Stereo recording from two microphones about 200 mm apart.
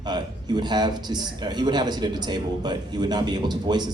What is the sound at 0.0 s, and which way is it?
A man's voice, 20° right (ahead or behind).